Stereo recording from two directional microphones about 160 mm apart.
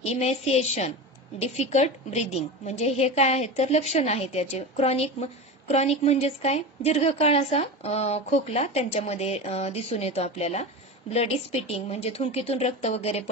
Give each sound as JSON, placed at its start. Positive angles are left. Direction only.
{"t": 0.0, "sound": "a woman's voice", "side_deg": 40}